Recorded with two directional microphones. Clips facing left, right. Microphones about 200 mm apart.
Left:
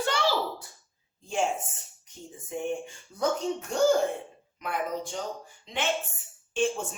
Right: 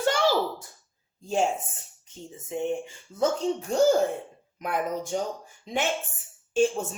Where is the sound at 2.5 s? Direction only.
20° right (ahead or behind).